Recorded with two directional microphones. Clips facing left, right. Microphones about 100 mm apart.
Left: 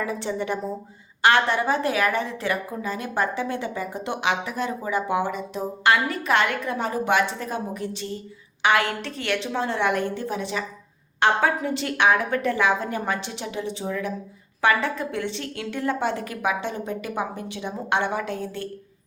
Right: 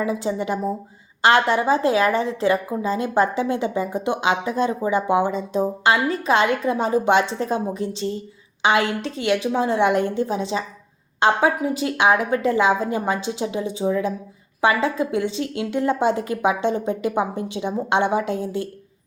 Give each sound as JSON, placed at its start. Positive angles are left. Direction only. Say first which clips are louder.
{"t": 0.0, "sound": "a woman's voice", "louder": "right 4 dB", "side_deg": -15}